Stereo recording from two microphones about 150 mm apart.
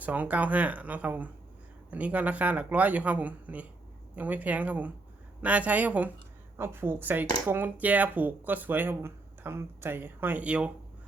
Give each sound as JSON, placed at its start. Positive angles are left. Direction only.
{"t": 0.0, "sound": "speech", "side_deg": -10}